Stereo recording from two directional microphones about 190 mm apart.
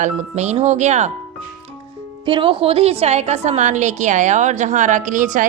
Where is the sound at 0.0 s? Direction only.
35° right (ahead or behind).